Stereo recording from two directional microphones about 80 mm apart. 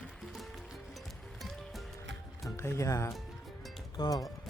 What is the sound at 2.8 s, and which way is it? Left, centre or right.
Speech, left.